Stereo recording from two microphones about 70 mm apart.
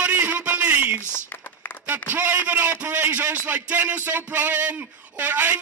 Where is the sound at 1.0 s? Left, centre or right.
Left.